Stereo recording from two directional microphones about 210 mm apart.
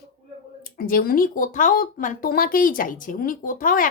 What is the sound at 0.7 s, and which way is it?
A woman's voice, 45° left (ahead or behind).